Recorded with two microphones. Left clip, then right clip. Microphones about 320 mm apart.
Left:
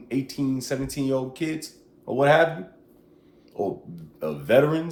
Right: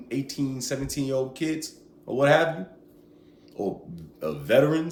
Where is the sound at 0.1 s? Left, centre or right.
Centre.